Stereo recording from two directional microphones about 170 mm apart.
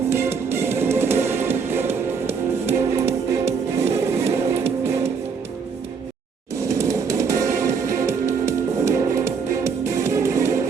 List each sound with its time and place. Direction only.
0.1 s music: 15° right (ahead or behind)
3.1 s music: 40° right (ahead or behind)
3.9 s music: 15° right (ahead or behind)
6.6 s music: 15° right (ahead or behind)